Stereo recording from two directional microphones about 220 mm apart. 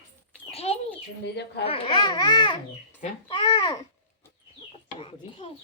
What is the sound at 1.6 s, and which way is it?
Speech, 25° left (ahead or behind).